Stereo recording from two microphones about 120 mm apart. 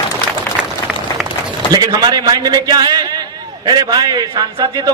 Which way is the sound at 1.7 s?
30° right (ahead or behind).